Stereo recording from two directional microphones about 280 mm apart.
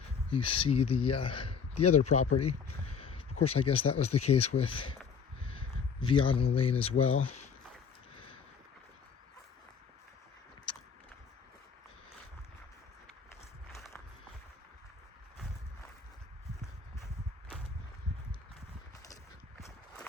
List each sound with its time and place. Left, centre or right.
0.3 s speech: centre
19.5 s walk: centre